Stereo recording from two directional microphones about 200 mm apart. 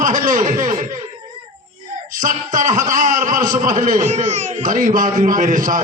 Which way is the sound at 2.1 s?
40° right (ahead or behind).